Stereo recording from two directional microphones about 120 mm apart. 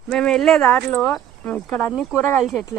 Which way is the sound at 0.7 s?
15° left (ahead or behind).